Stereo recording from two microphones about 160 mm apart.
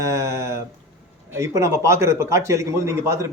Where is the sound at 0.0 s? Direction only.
20° right (ahead or behind).